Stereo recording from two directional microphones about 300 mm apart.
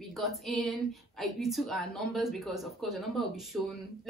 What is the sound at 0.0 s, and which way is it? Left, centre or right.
Female singing, centre.